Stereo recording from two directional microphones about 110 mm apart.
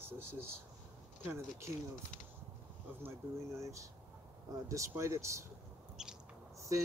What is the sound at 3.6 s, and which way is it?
Speech, 25° right (ahead or behind).